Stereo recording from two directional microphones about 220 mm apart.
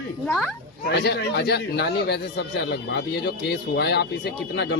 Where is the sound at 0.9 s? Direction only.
50° left (ahead or behind).